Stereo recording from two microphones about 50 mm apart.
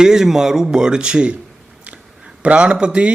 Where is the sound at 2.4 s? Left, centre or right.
Right.